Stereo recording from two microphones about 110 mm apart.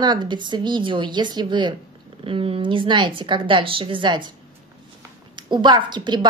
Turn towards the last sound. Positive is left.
turn(degrees=-45)  # may be behind; listen again after turning